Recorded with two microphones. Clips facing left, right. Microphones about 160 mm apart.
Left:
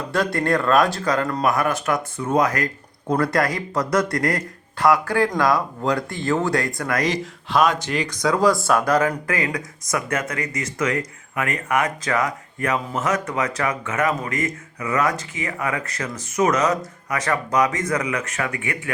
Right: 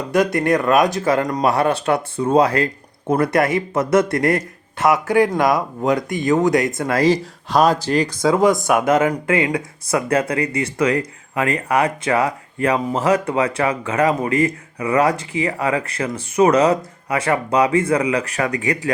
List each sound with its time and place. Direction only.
0.1 s speech: 20° right (ahead or behind)
1.5 s speech: 30° right (ahead or behind)